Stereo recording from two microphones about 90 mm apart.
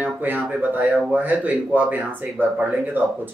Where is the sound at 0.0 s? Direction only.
15° right (ahead or behind).